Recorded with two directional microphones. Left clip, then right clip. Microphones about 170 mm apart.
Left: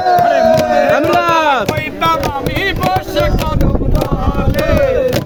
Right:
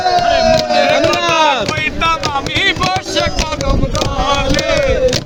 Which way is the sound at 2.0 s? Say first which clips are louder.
Left 3 dB; 35° left (ahead or behind).